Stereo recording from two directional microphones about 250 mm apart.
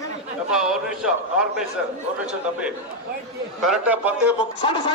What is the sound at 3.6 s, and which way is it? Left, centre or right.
Speech, centre.